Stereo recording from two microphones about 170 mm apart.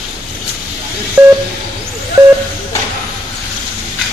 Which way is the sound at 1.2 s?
10° right (ahead or behind).